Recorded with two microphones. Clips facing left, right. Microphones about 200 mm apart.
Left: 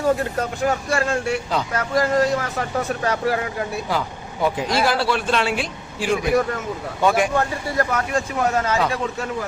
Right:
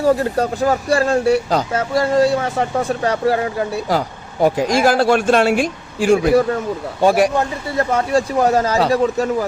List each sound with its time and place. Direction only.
0.0 s speech: 35° right (ahead or behind)
1.7 s speech: 25° right (ahead or behind); by 6.1 s 45° right (ahead or behind)
7.0 s speech: 35° right (ahead or behind)